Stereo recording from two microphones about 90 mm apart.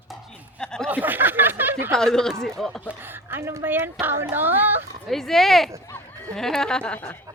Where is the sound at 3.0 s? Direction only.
25° right (ahead or behind).